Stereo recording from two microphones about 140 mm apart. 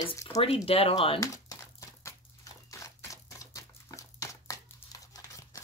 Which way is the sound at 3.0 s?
25° left (ahead or behind).